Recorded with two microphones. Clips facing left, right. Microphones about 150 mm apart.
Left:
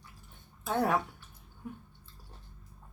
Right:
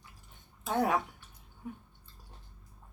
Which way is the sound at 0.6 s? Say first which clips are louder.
Even; 20° right (ahead or behind).